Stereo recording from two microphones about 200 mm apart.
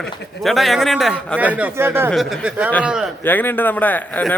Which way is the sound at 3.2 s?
10° left (ahead or behind).